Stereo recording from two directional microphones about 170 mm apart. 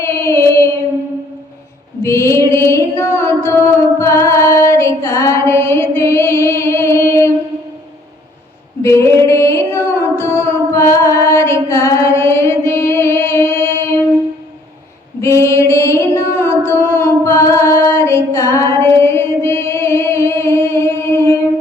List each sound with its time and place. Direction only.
0.0 s child singing: 15° left (ahead or behind)
2.0 s mantra: 15° left (ahead or behind)
4.0 s female singing: 15° left (ahead or behind)
8.8 s female singing: 15° left (ahead or behind)
15.2 s female singing: 15° left (ahead or behind)